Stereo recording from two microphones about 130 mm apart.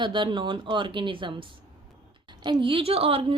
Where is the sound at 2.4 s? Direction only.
40° right (ahead or behind).